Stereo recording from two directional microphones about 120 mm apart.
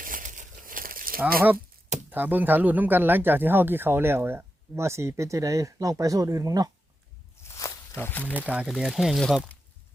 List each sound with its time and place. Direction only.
0.2 s crumpling: 90° right
1.2 s speech: 15° right (ahead or behind); by 6.7 s 30° right (ahead or behind)
7.9 s speech: 15° left (ahead or behind)
8.4 s speech: 10° right (ahead or behind)